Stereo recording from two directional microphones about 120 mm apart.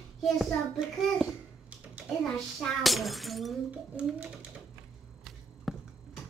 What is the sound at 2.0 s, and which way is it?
Speech, 5° left (ahead or behind).